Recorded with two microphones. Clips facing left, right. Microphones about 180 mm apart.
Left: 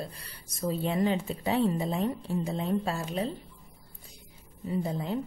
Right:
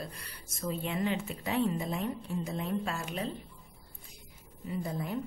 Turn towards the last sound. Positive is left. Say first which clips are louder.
# left 4 dB
turn(degrees=25)  # may be behind; listen again after turning